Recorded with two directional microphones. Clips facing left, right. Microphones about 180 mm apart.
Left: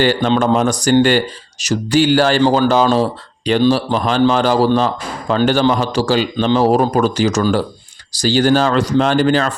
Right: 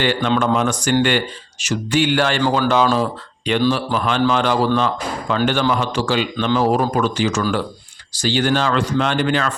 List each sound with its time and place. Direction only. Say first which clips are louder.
0.0 s speech: left 4 dB; 40° left (ahead or behind)